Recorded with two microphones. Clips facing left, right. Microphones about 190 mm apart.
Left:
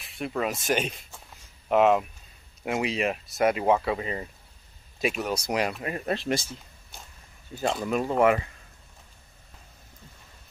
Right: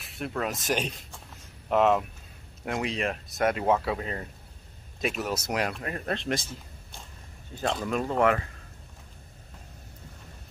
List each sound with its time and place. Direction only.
0.0 s speech: centre (ahead or behind)